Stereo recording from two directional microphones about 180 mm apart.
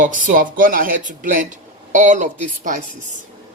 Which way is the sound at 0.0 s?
50° right (ahead or behind).